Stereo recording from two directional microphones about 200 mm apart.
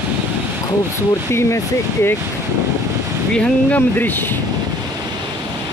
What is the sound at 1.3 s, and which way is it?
Speech, 15° left (ahead or behind).